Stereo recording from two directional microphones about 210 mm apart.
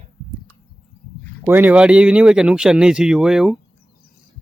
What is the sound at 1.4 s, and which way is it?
Speech, 10° right (ahead or behind).